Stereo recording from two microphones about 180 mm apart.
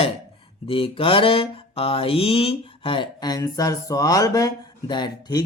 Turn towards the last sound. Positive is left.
turn(degrees=25)  # may be behind; listen again after turning